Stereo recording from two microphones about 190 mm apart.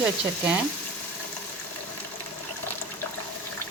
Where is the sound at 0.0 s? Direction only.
5° right (ahead or behind).